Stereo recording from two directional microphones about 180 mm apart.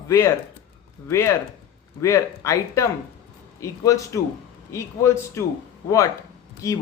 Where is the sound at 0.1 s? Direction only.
15° left (ahead or behind).